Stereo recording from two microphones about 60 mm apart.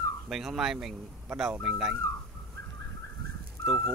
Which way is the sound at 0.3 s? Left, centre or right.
Centre.